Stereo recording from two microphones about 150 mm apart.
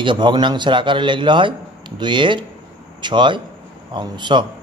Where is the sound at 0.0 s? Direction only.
30° right (ahead or behind).